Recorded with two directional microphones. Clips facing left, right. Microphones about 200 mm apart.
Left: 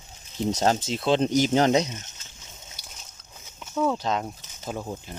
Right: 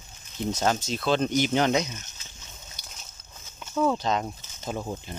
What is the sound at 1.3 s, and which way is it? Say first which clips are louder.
Speech: left 3 dB; 40° left (ahead or behind).